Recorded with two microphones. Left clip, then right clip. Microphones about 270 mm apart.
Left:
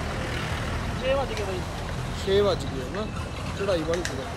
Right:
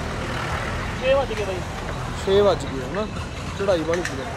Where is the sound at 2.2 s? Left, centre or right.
Centre.